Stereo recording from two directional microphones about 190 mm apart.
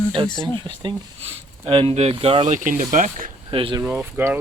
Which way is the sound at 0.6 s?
25° right (ahead or behind).